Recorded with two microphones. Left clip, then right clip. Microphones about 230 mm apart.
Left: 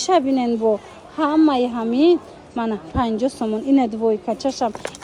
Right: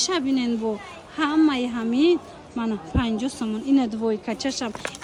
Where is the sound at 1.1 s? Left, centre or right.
Right.